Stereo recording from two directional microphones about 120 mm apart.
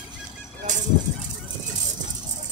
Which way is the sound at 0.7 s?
90° right.